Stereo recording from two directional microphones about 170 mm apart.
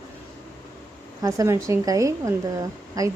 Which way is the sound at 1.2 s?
20° right (ahead or behind).